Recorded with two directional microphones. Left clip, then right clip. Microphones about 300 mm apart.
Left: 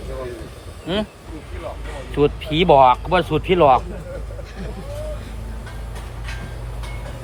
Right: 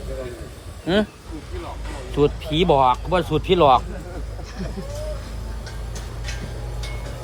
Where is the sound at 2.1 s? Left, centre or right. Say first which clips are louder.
Left 1 dB; centre.